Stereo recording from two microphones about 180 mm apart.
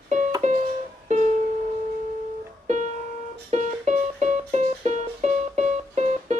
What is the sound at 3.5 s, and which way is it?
Music, 40° right (ahead or behind).